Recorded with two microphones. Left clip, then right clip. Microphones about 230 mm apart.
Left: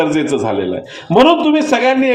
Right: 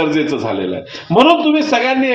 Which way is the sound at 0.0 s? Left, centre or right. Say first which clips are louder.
Left 1 dB; left.